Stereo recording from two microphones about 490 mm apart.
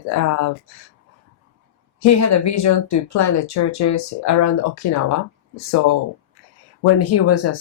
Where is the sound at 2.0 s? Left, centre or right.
Left.